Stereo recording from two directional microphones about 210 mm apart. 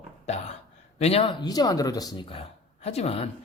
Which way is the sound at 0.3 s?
30° left (ahead or behind).